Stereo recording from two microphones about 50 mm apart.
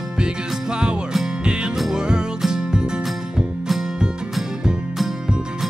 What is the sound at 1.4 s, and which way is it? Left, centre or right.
Music, centre.